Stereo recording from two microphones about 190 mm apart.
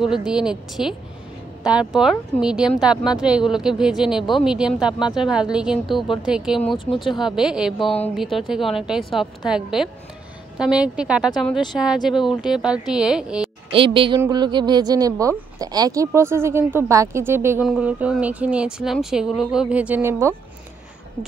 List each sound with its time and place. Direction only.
0.0 s speech: 5° right (ahead or behind)
6.8 s speech: 25° left (ahead or behind)
7.1 s speech: centre (ahead or behind)
13.7 s speech: 30° right (ahead or behind)